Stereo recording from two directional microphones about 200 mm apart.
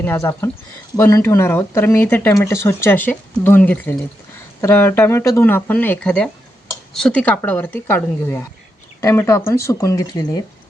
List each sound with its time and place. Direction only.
0.0 s speech: 10° left (ahead or behind)